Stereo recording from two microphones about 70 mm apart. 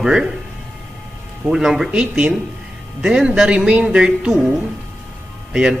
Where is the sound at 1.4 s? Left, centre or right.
Centre.